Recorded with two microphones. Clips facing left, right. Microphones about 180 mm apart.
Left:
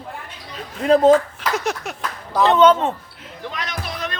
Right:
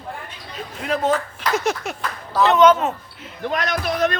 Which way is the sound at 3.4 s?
55° right (ahead or behind).